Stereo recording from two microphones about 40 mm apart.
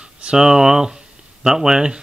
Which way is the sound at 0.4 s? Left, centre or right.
Centre.